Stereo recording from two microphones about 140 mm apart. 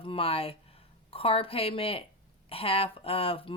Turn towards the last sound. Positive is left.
turn(degrees=40)  # may be behind; listen again after turning